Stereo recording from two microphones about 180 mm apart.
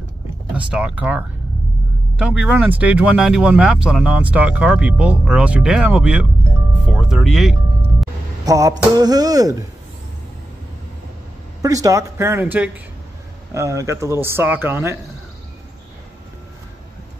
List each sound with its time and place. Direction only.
0.6 s speech: 5° right (ahead or behind)
8.5 s speech: 20° right (ahead or behind)
11.6 s speech: 20° right (ahead or behind)